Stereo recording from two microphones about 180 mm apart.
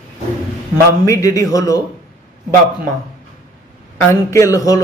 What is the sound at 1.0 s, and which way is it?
Speech, 15° left (ahead or behind).